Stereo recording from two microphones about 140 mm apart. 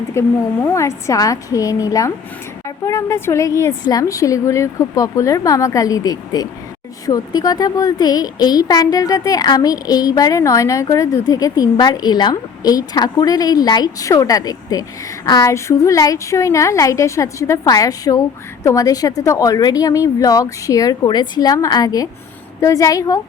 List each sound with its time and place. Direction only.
0.1 s a woman's voice: 20° left (ahead or behind)